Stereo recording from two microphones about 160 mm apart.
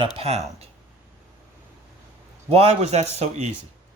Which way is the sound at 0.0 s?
40° right (ahead or behind).